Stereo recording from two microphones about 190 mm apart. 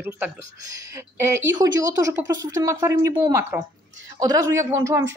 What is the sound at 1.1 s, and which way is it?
Speech, 15° right (ahead or behind).